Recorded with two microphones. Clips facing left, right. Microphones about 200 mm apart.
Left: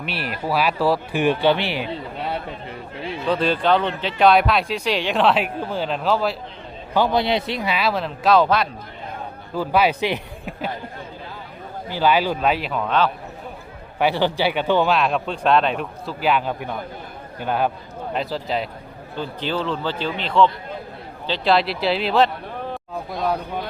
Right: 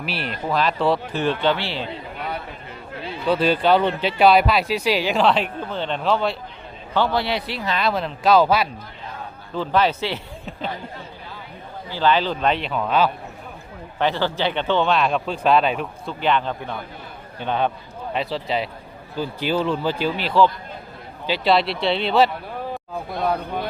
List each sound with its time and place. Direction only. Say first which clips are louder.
0.0 s speech: even; centre (ahead or behind)
2.1 s a sound: left 2 dB; 30° left (ahead or behind)
3.2 s speech: right 1 dB; 5° right (ahead or behind)
6.9 s speech: left 2 dB; 15° left (ahead or behind); by 8.7 s 5° right (ahead or behind)
9.6 s speech: left 1 dB; 10° left (ahead or behind)
11.9 s speech: left 1 dB; 10° left (ahead or behind); by 13.1 s 5° right (ahead or behind)
14.0 s speech: left 2 dB; 15° left (ahead or behind)